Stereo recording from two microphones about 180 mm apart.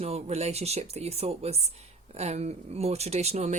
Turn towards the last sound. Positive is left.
turn(degrees=-40)  # may be behind; listen again after turning